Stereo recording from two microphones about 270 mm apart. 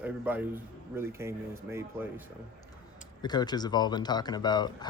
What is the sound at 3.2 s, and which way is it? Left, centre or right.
Speech, centre.